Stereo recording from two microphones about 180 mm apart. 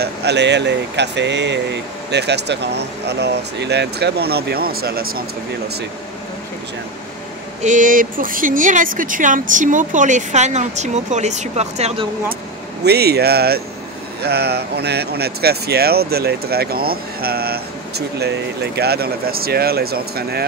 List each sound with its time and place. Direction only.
0.0 s speech: 70° right (ahead or behind)
7.6 s speech: 45° right (ahead or behind)
12.8 s speech: 65° right (ahead or behind)